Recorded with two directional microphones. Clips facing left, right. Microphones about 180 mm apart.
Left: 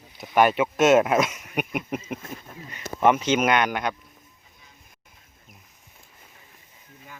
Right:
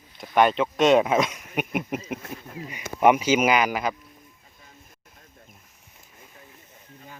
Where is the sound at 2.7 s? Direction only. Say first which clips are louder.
Right 2 dB; 10° right (ahead or behind).